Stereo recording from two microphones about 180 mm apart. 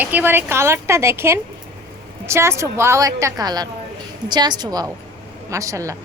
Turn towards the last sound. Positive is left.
turn(degrees=-20)  # may be behind; listen again after turning